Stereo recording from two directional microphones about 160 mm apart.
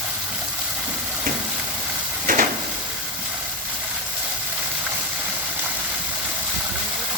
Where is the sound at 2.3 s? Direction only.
60° right (ahead or behind).